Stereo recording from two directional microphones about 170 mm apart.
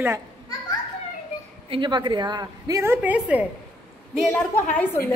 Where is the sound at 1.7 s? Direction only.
25° right (ahead or behind); by 3.5 s 10° right (ahead or behind).